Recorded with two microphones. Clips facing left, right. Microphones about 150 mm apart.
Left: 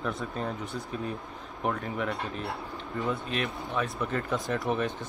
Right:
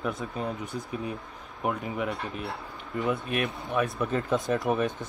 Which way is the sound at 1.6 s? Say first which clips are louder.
Right 1 dB; 10° right (ahead or behind).